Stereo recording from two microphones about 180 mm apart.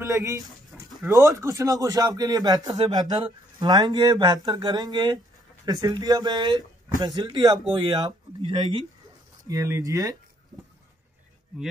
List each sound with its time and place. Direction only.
0.0 s speech: 15° right (ahead or behind)
0.7 s dog: 10° right (ahead or behind)
1.1 s speech: 20° right (ahead or behind)
9.5 s speech: 15° right (ahead or behind)